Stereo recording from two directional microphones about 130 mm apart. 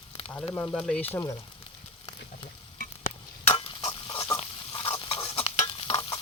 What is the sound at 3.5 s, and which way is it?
Stir, 40° left (ahead or behind).